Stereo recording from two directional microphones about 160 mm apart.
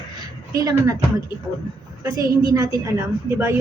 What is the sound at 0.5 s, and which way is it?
Speech, 20° right (ahead or behind).